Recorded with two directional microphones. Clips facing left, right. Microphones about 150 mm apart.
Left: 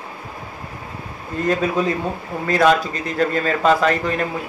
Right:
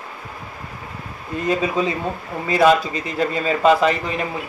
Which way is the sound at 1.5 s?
5° right (ahead or behind).